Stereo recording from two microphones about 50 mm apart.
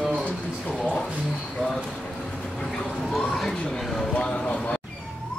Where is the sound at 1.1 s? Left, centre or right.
Centre.